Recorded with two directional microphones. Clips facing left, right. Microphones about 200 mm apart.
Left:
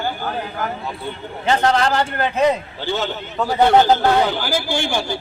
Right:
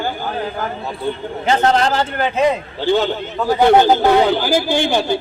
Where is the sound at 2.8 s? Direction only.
15° right (ahead or behind).